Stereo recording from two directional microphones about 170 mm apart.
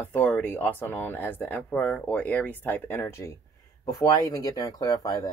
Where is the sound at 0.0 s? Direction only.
10° left (ahead or behind).